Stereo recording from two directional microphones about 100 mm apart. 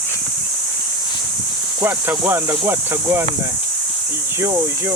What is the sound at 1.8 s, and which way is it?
Speech, 20° right (ahead or behind).